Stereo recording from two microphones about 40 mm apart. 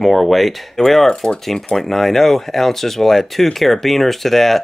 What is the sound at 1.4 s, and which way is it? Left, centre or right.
Speech, centre.